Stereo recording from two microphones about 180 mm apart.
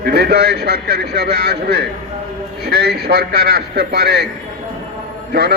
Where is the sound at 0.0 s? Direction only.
65° right (ahead or behind).